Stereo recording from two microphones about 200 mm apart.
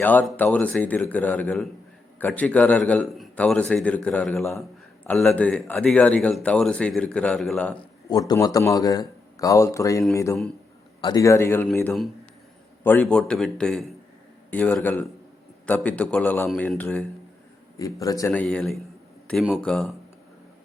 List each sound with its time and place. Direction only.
0.0 s a man's voice: 10° left (ahead or behind)
8.3 s a man's voice: 20° left (ahead or behind)
17.7 s a man's voice: 20° left (ahead or behind)
18.3 s a man's voice: 5° left (ahead or behind)